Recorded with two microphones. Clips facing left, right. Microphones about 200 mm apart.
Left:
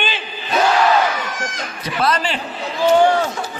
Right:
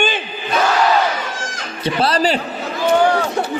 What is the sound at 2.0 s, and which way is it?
Speech, 35° right (ahead or behind).